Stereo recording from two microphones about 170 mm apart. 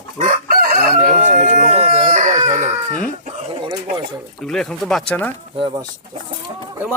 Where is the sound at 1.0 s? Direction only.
50° right (ahead or behind).